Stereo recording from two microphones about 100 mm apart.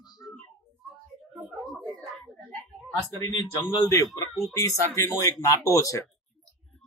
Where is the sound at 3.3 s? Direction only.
40° left (ahead or behind).